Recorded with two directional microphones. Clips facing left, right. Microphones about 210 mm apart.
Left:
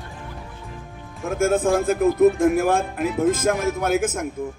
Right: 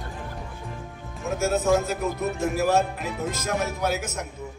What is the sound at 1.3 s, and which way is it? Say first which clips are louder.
Speech: left 3 dB; 50° left (ahead or behind).